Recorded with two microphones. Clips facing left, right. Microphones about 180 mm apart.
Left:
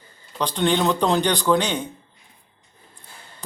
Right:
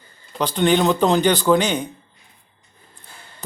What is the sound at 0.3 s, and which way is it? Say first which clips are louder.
A man's voice: right 3 dB; centre (ahead or behind).